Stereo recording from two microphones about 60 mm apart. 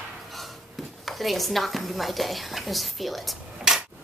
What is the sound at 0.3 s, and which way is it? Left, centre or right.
A woman's voice, centre.